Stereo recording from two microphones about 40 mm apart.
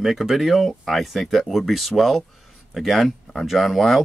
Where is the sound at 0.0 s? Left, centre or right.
Centre.